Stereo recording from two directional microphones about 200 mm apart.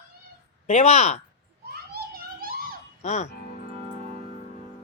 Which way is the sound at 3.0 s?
35° left (ahead or behind).